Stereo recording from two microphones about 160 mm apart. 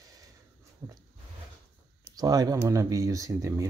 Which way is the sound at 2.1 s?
25° right (ahead or behind).